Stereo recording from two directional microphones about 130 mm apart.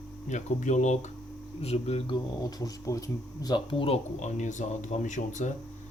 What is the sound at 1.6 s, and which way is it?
Speech, 50° left (ahead or behind).